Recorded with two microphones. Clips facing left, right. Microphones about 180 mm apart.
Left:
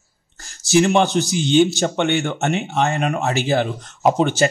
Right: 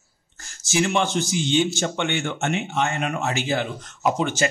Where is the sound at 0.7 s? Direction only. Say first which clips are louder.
Left 7 dB; 35° left (ahead or behind).